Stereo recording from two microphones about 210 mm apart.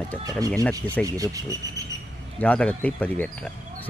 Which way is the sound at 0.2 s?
15° right (ahead or behind).